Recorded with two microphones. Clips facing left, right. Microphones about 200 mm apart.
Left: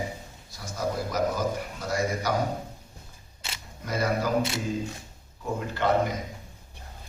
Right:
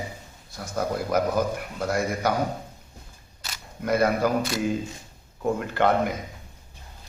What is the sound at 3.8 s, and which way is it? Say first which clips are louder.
Speech: right 5 dB; 60° right (ahead or behind).